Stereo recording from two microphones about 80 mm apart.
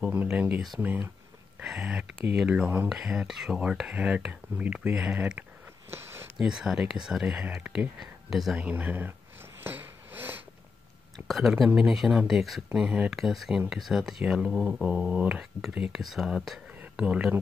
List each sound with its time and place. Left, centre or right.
0.0 s speech: right
5.9 s a sound: right
6.3 s speech: centre
8.5 s speech: centre
9.6 s sniff: right
11.1 s speech: centre
12.7 s speech: centre
13.1 s speech: centre
15.9 s speech: centre
16.9 s speech: centre